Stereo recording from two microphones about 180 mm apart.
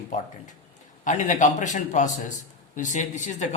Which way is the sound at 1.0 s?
45° left (ahead or behind).